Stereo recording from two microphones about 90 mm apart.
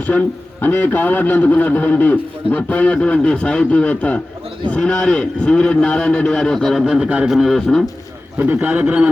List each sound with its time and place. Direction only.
0.1 s a man's voice: 20° left (ahead or behind); by 7.9 s 5° left (ahead or behind)
8.4 s a man's voice: 20° right (ahead or behind)